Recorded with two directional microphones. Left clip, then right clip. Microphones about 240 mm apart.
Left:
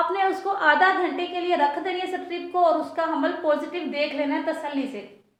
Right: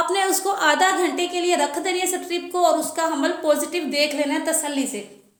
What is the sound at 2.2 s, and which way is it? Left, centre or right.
A woman's voice, right.